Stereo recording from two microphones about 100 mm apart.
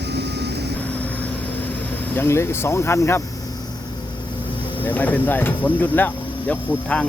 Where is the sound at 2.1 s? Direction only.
25° left (ahead or behind).